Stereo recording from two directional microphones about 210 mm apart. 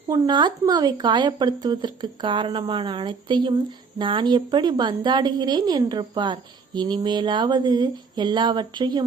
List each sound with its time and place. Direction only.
0.1 s a woman's voice: 20° right (ahead or behind)